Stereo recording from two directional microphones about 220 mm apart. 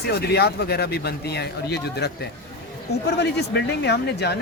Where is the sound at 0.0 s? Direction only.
45° left (ahead or behind).